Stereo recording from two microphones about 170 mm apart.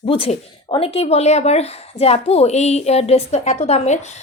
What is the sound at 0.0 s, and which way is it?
Speech, 30° left (ahead or behind).